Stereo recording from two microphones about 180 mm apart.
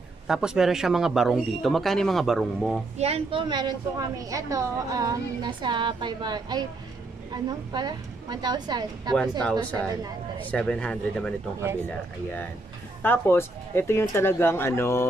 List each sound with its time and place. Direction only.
0.3 s speech: 5° right (ahead or behind)
3.0 s a woman's voice: 30° right (ahead or behind)
9.4 s speech: 5° left (ahead or behind)
13.0 s speech: 10° left (ahead or behind)